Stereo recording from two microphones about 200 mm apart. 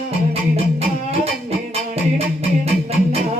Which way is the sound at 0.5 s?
30° right (ahead or behind).